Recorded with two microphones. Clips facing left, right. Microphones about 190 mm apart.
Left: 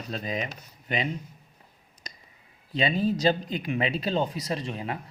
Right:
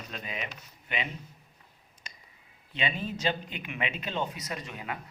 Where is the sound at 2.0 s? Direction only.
40° left (ahead or behind).